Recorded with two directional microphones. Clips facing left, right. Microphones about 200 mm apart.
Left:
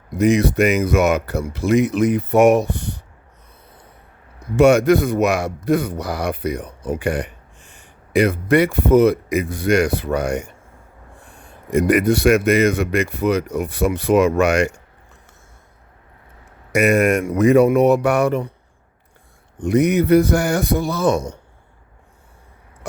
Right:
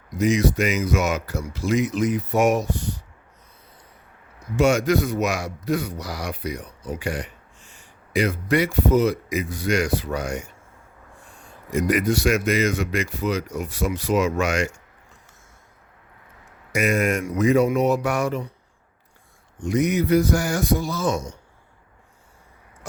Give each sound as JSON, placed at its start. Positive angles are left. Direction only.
{"t": 0.1, "sound": "a man's voice", "side_deg": 60}
{"t": 4.5, "sound": "a man's voice", "side_deg": 60}
{"t": 11.7, "sound": "a man's voice", "side_deg": 60}
{"t": 16.7, "sound": "a man's voice", "side_deg": 65}
{"t": 19.5, "sound": "a man's voice", "side_deg": 60}